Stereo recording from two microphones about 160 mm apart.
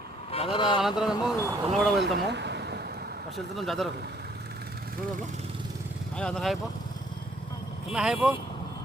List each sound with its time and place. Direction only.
0.3 s speech: 35° left (ahead or behind)
0.8 s speech: centre (ahead or behind)
2.1 s vehicle: 90° right
3.3 s speech: centre (ahead or behind)
6.1 s speech: 5° left (ahead or behind)
7.9 s speech: 5° right (ahead or behind)